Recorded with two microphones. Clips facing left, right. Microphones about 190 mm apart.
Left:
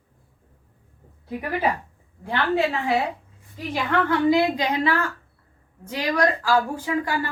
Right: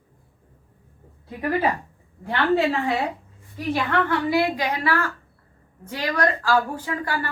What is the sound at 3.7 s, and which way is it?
A woman's voice, 15° left (ahead or behind).